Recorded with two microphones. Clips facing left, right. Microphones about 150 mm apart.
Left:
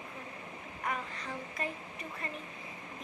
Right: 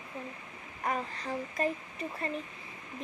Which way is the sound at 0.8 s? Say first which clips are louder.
Right 4 dB; 35° right (ahead or behind).